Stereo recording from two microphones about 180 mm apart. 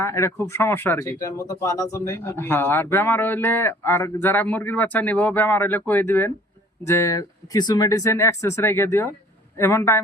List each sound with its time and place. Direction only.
0.0 s speech: 15° left (ahead or behind)